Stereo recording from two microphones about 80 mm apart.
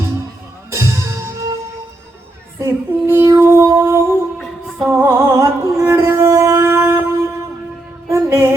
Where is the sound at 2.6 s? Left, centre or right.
Right.